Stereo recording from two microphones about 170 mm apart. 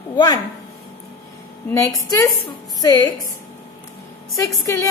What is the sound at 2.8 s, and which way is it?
Speech, 20° left (ahead or behind).